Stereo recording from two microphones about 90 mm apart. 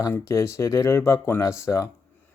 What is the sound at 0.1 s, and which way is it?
Speech, 35° left (ahead or behind).